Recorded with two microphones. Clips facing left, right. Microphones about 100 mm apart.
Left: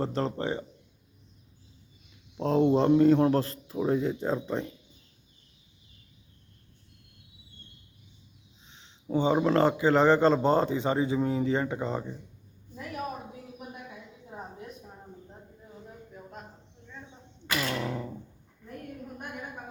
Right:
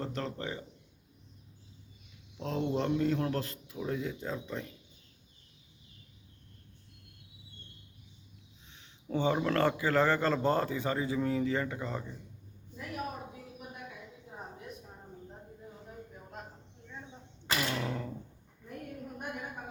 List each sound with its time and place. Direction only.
0.0 s speech: 35° left (ahead or behind)
2.4 s speech: 35° left (ahead or behind)
8.6 s a man's voice: 20° left (ahead or behind)
17.8 s a sound: 10° left (ahead or behind)